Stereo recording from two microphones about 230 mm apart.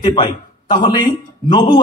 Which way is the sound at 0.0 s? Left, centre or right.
Left.